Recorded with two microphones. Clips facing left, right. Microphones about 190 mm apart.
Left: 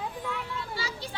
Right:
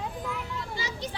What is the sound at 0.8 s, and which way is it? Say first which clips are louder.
Speech: right 2 dB; 20° right (ahead or behind).